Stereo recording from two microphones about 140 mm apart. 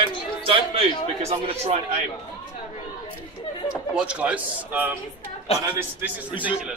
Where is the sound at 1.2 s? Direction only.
45° right (ahead or behind).